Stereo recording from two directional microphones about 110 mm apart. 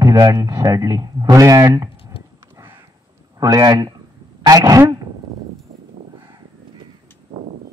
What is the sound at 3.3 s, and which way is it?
A man's voice, 35° right (ahead or behind).